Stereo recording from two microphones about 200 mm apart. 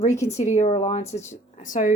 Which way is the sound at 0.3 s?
35° left (ahead or behind).